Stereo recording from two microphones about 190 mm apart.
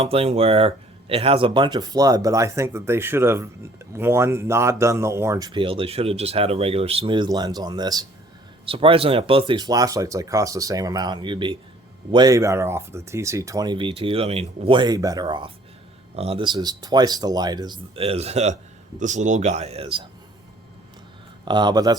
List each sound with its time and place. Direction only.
0.0 s a man's voice: 30° right (ahead or behind)
21.4 s speech: 25° right (ahead or behind)